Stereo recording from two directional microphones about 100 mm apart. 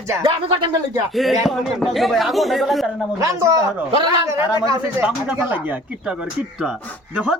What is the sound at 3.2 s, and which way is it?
Speech, 30° right (ahead or behind).